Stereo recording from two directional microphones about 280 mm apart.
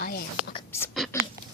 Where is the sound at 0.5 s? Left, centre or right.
Centre.